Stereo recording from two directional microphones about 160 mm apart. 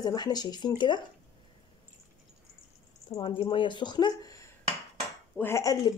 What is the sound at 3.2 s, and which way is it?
Speech, 30° left (ahead or behind).